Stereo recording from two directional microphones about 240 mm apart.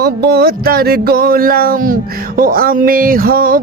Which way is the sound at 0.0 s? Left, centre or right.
Right.